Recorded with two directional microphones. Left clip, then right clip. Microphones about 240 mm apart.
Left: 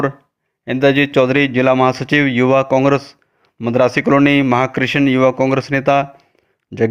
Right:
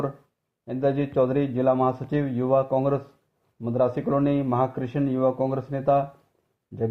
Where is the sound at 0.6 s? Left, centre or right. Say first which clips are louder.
Left 12 dB; left.